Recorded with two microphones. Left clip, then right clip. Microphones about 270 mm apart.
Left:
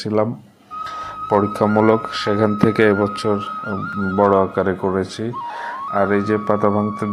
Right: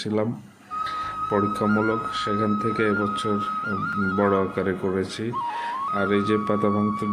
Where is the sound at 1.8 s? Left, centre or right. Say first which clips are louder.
Left 8 dB; left.